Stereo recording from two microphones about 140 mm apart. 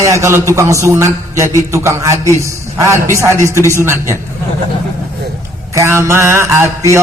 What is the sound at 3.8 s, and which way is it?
Speech, 15° right (ahead or behind).